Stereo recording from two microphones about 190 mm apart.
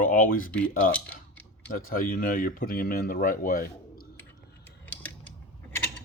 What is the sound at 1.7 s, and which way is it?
Speech, 50° left (ahead or behind).